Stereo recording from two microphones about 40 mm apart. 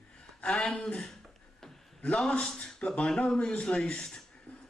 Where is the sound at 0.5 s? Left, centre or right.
Centre.